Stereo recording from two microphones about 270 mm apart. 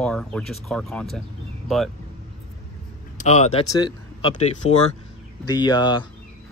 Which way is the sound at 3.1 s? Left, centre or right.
Left.